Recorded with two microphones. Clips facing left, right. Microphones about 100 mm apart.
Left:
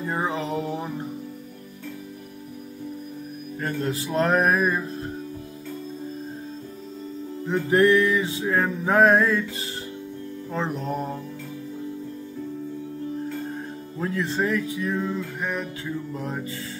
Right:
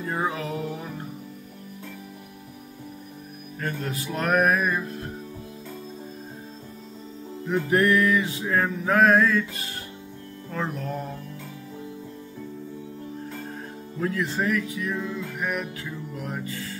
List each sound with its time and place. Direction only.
0.0 s music: 15° left (ahead or behind)
3.5 s music: 25° left (ahead or behind)
7.7 s music: 30° left (ahead or behind)
13.9 s music: 25° left (ahead or behind)